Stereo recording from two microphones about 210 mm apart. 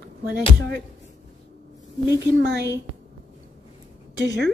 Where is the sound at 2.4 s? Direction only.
50° right (ahead or behind).